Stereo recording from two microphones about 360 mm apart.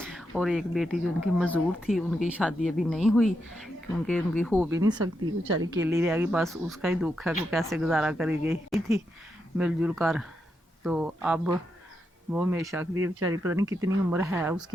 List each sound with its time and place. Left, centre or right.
0.0 s speech: centre
5.4 s a woman's voice: right
5.8 s speech: centre